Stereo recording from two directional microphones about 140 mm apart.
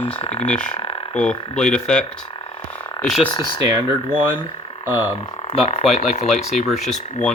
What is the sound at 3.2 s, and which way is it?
Speech, 35° left (ahead or behind).